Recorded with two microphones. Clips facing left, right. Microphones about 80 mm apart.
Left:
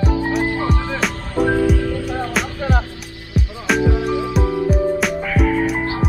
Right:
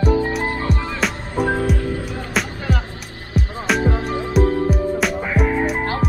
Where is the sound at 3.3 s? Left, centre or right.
Right.